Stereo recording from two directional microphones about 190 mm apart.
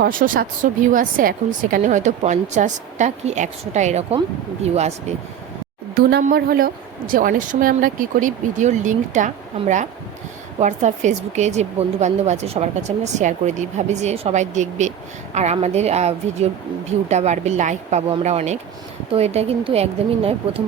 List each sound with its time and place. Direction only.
0.0 s speech: 45° right (ahead or behind)
5.9 s speech: 55° right (ahead or behind); by 20.6 s 30° right (ahead or behind)